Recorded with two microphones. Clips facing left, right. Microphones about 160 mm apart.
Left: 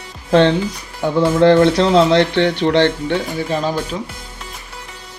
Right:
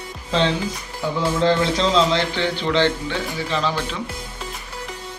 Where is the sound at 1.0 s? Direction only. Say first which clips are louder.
Left 7 dB; 65° left (ahead or behind); by 4.0 s 45° left (ahead or behind).